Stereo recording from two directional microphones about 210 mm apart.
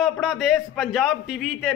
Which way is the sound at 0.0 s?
Centre (ahead or behind).